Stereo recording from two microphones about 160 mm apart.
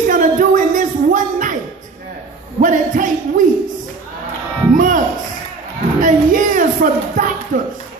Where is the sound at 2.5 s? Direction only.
55° right (ahead or behind).